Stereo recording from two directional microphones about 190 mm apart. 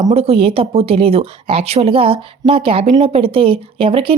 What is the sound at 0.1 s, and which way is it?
A woman's voice, 35° right (ahead or behind).